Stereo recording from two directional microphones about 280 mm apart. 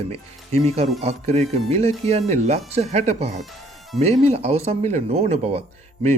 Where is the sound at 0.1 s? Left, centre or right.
Right.